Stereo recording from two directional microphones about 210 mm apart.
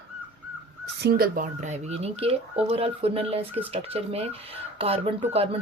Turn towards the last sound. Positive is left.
turn(degrees=-30)  # may be behind; listen again after turning